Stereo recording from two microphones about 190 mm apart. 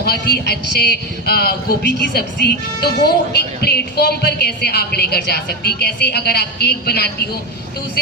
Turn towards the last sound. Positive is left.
turn(degrees=55)  # may be behind; listen again after turning